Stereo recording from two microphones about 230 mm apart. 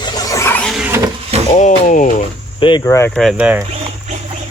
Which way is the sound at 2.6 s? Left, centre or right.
Centre.